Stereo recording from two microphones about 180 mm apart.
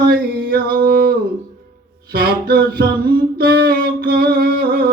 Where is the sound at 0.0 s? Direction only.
55° right (ahead or behind).